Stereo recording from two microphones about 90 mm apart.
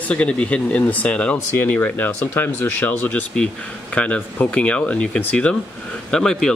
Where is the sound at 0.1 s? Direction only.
15° left (ahead or behind).